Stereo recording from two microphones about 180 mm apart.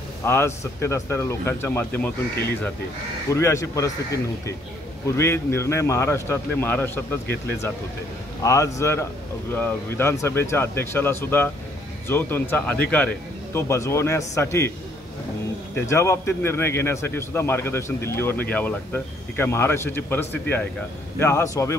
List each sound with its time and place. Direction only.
0.2 s a man's voice: 15° left (ahead or behind)
3.3 s a man's voice: 15° left (ahead or behind)
8.4 s a man's voice: 15° left (ahead or behind)
15.7 s a man's voice: 15° left (ahead or behind)